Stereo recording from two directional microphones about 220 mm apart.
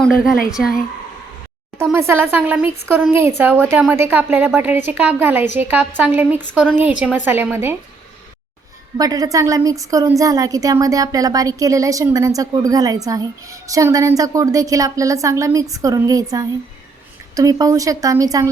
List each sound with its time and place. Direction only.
0.0 s a woman's voice: centre (ahead or behind)
1.8 s a woman's voice: 10° right (ahead or behind)
9.0 s a woman's voice: 15° right (ahead or behind)